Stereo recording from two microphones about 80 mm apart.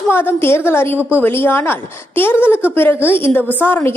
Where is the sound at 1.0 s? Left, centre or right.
Right.